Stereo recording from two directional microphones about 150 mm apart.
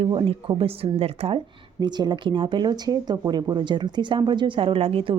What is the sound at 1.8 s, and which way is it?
Speech, 30° right (ahead or behind).